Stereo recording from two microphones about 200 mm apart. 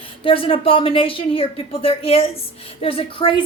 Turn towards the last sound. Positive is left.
turn(degrees=25)  # may be behind; listen again after turning